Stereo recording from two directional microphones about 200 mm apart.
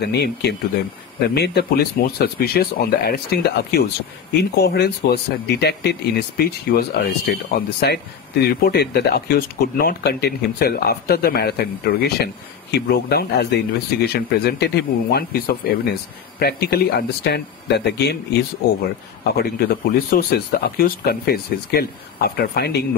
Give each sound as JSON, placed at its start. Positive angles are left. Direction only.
{"t": 0.0, "sound": "speech", "side_deg": 55}